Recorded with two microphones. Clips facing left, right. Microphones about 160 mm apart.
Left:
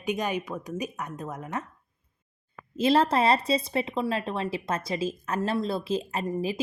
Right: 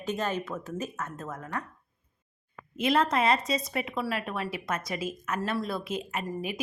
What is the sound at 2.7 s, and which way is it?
Speech, 30° left (ahead or behind).